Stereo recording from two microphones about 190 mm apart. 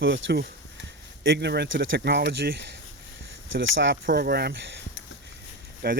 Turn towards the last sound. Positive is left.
turn(degrees=-55)  # may be behind; listen again after turning